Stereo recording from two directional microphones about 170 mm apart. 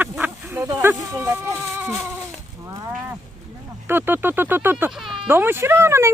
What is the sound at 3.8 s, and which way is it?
Speech, 10° right (ahead or behind).